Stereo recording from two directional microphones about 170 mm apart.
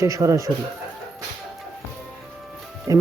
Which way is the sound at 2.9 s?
20° right (ahead or behind).